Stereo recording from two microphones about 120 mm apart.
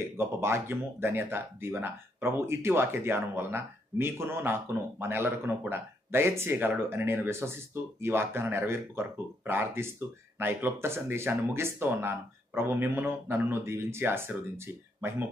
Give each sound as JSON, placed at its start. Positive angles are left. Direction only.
{"t": 0.2, "sound": "speech", "side_deg": -20}